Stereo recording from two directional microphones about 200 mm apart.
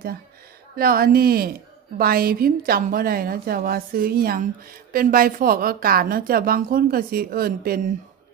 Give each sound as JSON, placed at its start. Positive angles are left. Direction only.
{"t": 0.7, "sound": "a woman's voice", "side_deg": -45}